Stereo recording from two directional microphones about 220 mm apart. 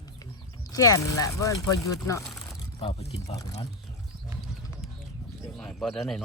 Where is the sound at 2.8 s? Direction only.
30° left (ahead or behind).